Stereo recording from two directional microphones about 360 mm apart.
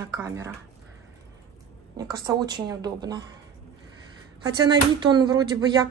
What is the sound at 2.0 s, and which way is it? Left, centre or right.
A woman's voice, centre.